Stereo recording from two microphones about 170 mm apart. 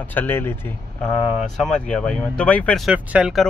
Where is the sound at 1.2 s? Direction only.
5° right (ahead or behind).